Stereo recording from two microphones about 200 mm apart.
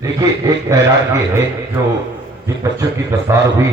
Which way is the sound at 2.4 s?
15° right (ahead or behind).